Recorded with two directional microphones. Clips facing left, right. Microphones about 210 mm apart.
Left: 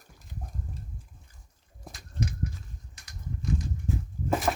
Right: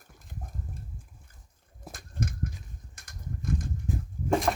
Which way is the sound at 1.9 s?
50° right (ahead or behind).